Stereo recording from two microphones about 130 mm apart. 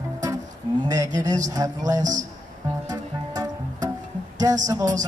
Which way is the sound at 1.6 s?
25° right (ahead or behind).